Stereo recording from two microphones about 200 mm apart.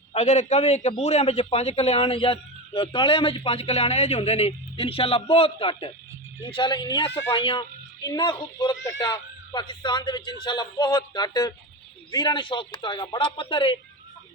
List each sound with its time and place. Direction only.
0.1 s a man's voice: 35° left (ahead or behind)